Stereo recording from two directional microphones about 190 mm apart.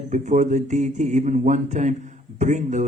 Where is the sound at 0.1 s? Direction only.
40° right (ahead or behind).